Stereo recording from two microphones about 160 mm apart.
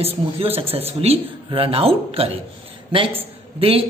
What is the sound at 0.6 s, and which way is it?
Speech, 40° right (ahead or behind).